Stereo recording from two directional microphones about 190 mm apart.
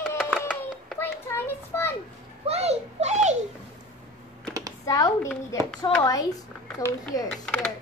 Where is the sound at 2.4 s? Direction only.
35° right (ahead or behind).